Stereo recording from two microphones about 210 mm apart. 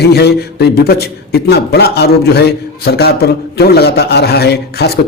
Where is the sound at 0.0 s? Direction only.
50° left (ahead or behind).